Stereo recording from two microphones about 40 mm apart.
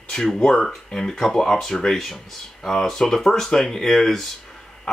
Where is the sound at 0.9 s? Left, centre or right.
Centre.